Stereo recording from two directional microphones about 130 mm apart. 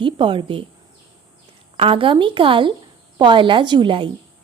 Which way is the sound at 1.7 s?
45° right (ahead or behind).